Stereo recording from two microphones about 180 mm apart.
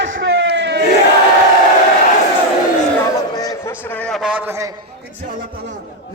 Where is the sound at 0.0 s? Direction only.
75° right (ahead or behind).